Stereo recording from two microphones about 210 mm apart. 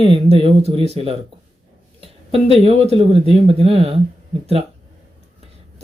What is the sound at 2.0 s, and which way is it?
Speech, 30° right (ahead or behind).